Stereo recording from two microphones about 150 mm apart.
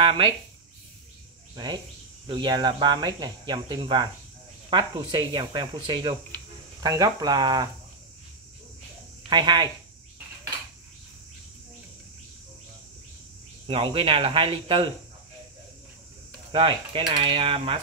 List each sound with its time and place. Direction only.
0.0 s speech: 35° right (ahead or behind)
1.5 s speech: 30° right (ahead or behind)
9.3 s speech: 30° right (ahead or behind)
13.7 s speech: 35° right (ahead or behind)
16.5 s speech: 35° right (ahead or behind)